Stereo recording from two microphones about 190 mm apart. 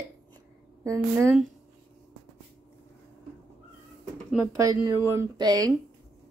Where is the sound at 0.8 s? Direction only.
15° right (ahead or behind).